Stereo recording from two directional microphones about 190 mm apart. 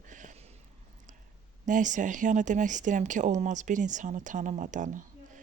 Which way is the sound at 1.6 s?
40° right (ahead or behind).